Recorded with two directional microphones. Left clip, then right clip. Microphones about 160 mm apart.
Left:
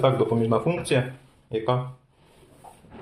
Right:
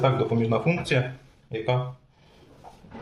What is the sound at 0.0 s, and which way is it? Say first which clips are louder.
Speech: left 2 dB; 15° left (ahead or behind).